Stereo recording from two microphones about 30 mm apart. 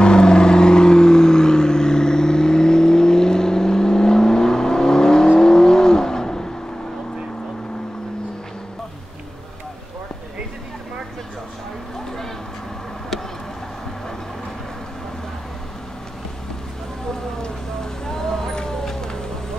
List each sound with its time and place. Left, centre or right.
0.0 s vehicle: left
18.0 s vehicle: centre